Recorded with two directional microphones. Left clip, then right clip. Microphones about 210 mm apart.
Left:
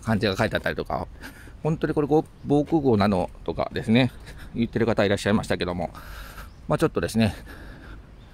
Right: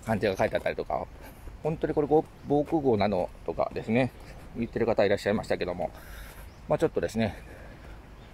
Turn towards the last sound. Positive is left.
turn(degrees=35)  # may be behind; listen again after turning